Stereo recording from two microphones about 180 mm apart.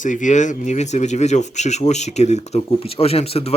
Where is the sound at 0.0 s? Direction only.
45° left (ahead or behind).